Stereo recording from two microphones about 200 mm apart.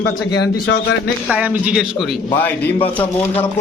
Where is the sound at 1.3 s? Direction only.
5° right (ahead or behind).